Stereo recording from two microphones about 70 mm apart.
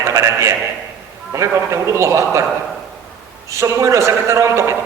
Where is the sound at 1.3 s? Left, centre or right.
Right.